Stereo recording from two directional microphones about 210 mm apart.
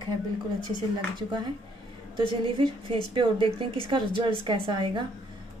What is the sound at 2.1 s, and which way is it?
A woman's voice, 25° right (ahead or behind).